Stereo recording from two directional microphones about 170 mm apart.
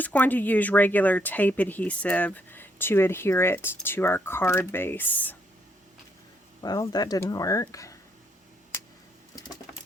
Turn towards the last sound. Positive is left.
turn(degrees=20)  # may be behind; listen again after turning